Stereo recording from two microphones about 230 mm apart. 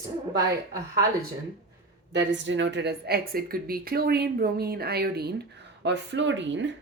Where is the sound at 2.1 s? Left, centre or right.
Right.